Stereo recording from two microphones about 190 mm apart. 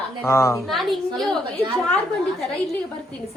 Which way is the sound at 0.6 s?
Centre (ahead or behind).